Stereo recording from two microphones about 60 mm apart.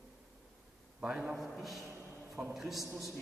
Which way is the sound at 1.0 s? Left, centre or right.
Centre.